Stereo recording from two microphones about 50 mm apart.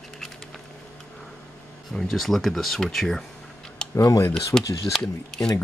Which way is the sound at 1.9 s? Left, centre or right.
Centre.